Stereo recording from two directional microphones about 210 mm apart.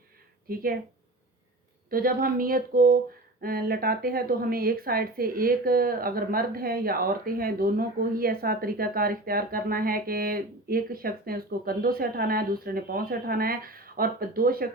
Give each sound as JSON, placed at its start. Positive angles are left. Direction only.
{"t": 0.4, "sound": "speech", "side_deg": -45}
{"t": 1.9, "sound": "speech", "side_deg": -45}